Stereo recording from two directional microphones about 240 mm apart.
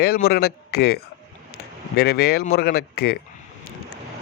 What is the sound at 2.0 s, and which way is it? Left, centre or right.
Speech, left.